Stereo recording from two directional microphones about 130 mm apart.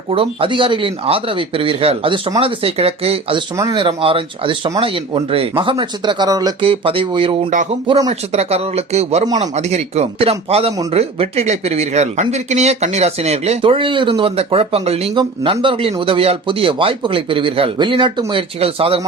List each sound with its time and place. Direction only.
0.1 s speech: 45° right (ahead or behind)
6.6 s speech: 45° right (ahead or behind)
8.3 s speech: 55° right (ahead or behind)
15.1 s speech: 40° right (ahead or behind)